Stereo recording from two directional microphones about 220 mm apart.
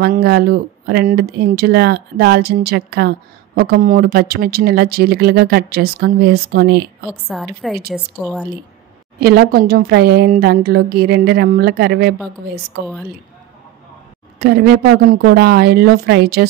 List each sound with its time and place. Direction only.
0.0 s speech: 45° right (ahead or behind)
7.1 s a woman's voice: centre (ahead or behind)
9.2 s speech: 45° right (ahead or behind)
14.4 s speech: 45° right (ahead or behind)